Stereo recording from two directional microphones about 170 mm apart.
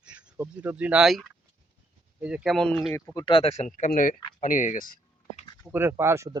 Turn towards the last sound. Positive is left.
turn(degrees=-15)  # may be behind; listen again after turning